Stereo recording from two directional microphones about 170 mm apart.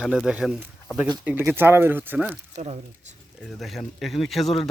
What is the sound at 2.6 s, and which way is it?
Speech, 40° right (ahead or behind).